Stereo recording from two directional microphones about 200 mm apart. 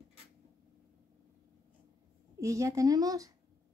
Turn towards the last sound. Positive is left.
turn(degrees=-20)  # may be behind; listen again after turning